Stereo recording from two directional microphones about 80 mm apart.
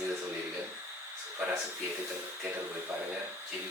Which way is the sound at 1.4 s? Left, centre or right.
Centre.